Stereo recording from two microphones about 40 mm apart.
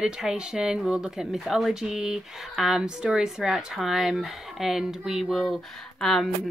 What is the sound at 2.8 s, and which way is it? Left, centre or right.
Speech, centre.